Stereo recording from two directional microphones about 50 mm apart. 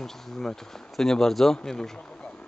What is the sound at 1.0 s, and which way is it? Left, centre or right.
Speech, centre.